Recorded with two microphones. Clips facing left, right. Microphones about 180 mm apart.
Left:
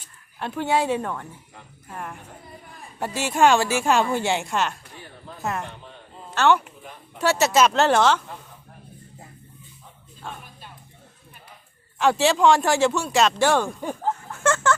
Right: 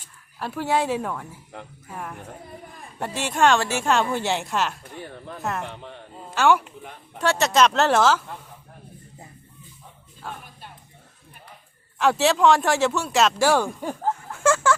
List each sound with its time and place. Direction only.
0.3 s speech: 5° right (ahead or behind)
5.6 s speech: 65° right (ahead or behind)
6.3 s speech: 10° right (ahead or behind)
7.2 s speech: 5° left (ahead or behind)
11.9 s speech: centre (ahead or behind)